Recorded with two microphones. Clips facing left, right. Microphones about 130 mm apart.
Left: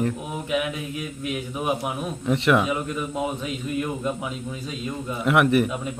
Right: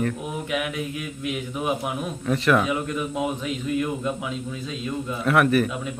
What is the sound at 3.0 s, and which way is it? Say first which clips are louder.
Speech: right 1 dB; 5° right (ahead or behind).